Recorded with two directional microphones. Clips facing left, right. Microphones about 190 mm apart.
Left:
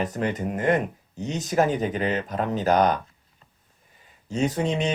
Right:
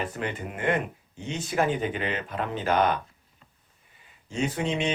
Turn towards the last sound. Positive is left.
turn(degrees=40)  # may be behind; listen again after turning